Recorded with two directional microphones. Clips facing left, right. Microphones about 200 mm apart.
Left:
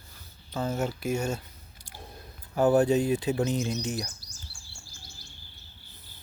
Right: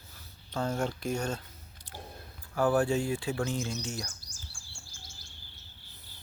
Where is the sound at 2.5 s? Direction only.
20° left (ahead or behind).